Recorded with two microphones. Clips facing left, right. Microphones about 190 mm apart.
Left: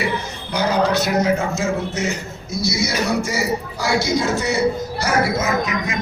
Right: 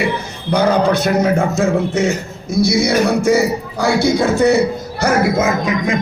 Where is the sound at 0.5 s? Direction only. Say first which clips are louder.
Right 5 dB; 55° right (ahead or behind).